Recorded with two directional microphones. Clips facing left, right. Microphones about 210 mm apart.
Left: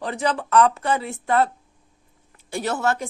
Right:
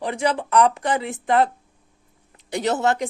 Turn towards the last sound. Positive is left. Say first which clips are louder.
# right 3 dB
turn(degrees=-20)  # may be behind; listen again after turning